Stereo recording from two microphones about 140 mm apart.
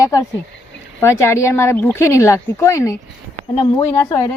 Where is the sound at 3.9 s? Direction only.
25° left (ahead or behind).